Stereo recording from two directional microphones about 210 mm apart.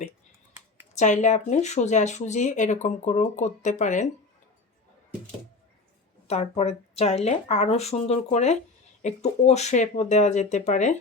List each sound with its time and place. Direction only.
0.9 s speech: 35° left (ahead or behind)
6.2 s speech: 30° left (ahead or behind)